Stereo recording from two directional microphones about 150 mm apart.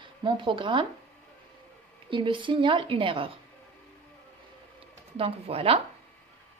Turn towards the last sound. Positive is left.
turn(degrees=-40)  # may be behind; listen again after turning